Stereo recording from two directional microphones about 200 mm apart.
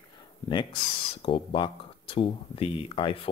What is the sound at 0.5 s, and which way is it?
Speech, 25° left (ahead or behind).